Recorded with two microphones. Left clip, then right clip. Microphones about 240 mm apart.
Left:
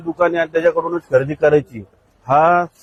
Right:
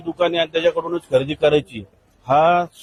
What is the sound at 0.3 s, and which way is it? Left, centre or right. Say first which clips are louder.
Speech: left 2 dB; right.